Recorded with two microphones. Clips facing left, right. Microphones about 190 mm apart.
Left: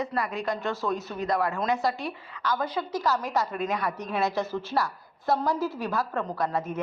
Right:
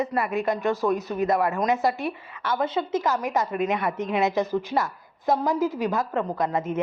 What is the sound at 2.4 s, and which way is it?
A woman's voice, 25° right (ahead or behind).